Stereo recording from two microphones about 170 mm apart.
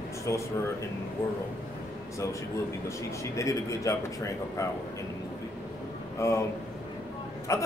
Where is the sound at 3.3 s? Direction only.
20° left (ahead or behind).